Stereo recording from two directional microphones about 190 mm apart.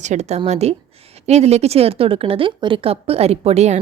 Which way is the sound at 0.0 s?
35° right (ahead or behind).